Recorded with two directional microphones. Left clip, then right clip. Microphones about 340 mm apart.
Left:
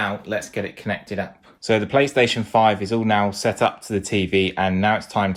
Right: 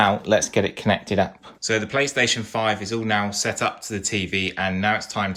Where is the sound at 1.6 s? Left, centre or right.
Centre.